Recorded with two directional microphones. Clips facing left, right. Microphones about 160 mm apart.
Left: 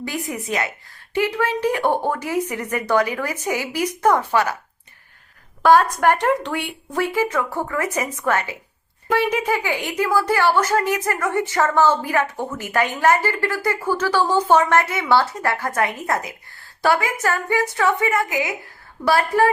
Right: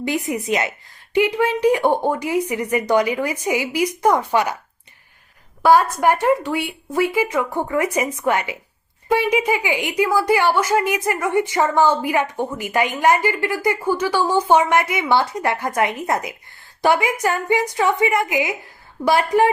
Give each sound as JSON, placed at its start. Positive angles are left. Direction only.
{"t": 0.0, "sound": "a woman's voice", "side_deg": -20}
{"t": 5.6, "sound": "a woman's voice", "side_deg": -10}